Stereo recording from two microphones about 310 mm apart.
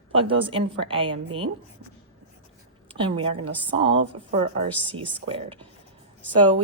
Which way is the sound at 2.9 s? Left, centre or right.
Centre.